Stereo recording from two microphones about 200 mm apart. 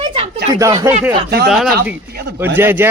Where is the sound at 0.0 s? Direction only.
30° right (ahead or behind).